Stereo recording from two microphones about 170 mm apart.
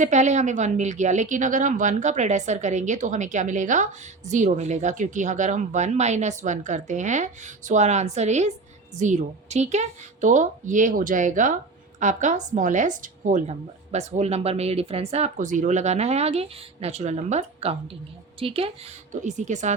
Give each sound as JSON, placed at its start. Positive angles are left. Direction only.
{"t": 0.0, "sound": "a woman's voice", "side_deg": -45}
{"t": 19.1, "sound": "speech", "side_deg": -45}